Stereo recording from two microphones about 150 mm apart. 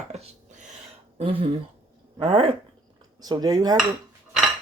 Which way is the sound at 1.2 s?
35° right (ahead or behind).